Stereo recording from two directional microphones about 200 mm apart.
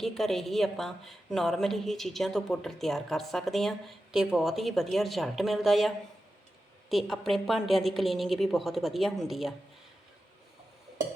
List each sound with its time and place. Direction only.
0.0 s a woman's voice: centre (ahead or behind)
6.9 s a woman's voice: centre (ahead or behind)